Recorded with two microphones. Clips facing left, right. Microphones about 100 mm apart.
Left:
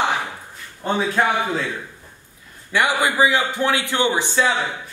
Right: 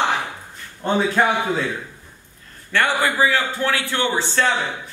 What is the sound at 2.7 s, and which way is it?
A man's voice, 15° left (ahead or behind).